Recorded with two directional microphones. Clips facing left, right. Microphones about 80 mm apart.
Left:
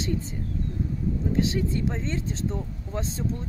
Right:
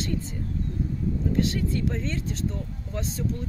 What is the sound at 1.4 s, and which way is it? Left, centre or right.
Speech, left.